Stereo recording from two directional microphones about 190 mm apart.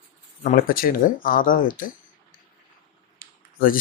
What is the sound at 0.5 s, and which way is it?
Speech, 50° left (ahead or behind).